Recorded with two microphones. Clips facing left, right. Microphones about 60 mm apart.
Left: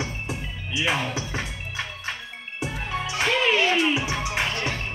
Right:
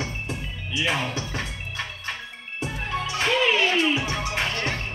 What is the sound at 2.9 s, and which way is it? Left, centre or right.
Music, centre.